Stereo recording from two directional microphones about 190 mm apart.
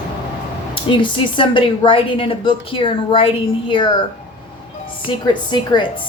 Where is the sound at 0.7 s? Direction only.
25° left (ahead or behind).